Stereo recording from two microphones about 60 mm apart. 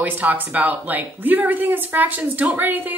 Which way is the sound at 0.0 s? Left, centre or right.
Right.